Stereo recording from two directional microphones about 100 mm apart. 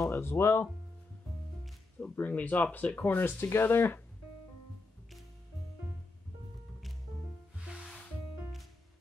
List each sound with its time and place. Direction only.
0.0 s speech: 25° left (ahead or behind)
2.0 s speech: 20° left (ahead or behind)
7.6 s music: 10° right (ahead or behind)